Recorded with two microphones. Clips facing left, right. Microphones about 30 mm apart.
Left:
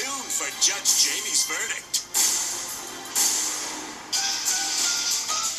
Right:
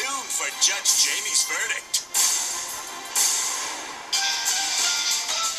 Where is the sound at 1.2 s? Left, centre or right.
Right.